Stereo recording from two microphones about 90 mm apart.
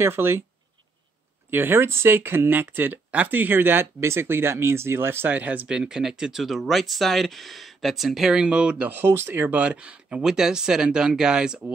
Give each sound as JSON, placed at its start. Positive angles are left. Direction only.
{"t": 0.0, "sound": "speech", "side_deg": -25}
{"t": 1.5, "sound": "speech", "side_deg": -25}